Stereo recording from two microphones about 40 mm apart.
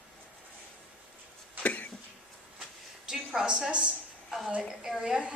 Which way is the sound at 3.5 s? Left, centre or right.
Right.